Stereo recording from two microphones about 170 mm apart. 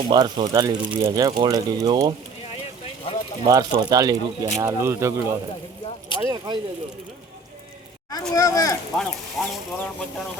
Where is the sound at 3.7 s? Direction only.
25° right (ahead or behind).